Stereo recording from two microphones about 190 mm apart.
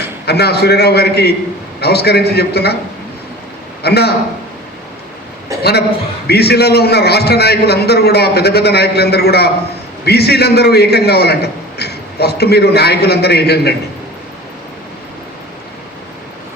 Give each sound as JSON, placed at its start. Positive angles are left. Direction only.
{"t": 0.3, "sound": "a man's voice", "side_deg": 60}
{"t": 3.8, "sound": "a man's voice", "side_deg": 60}
{"t": 6.2, "sound": "a man's voice", "side_deg": 60}